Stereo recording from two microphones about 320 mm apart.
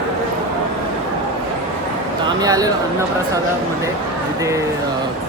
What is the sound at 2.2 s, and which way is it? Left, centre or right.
Speech, centre.